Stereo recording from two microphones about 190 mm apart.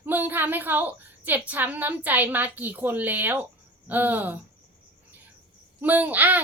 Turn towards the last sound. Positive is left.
turn(degrees=-10)  # may be behind; listen again after turning